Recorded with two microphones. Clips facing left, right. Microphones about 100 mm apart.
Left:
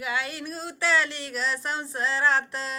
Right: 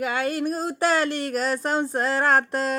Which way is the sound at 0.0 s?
45° right (ahead or behind).